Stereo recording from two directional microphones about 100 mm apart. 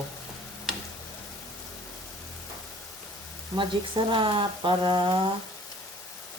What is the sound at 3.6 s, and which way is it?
Speech, 60° right (ahead or behind).